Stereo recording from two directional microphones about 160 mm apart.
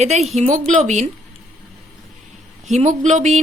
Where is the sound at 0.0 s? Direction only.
45° right (ahead or behind).